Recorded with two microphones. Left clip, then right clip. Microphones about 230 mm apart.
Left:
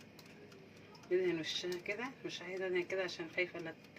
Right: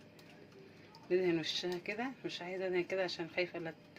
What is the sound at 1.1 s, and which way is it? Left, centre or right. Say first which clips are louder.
Speech: right 2 dB; right.